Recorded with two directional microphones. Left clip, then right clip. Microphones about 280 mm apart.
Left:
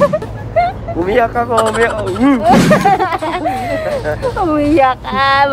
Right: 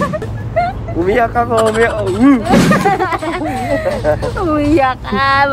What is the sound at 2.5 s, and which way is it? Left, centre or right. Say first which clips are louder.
Speech: left 1 dB; centre.